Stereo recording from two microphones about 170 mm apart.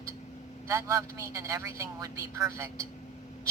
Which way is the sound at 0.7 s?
15° right (ahead or behind).